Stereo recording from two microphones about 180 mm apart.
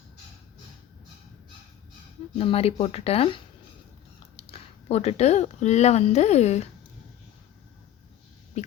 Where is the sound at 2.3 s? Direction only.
35° left (ahead or behind).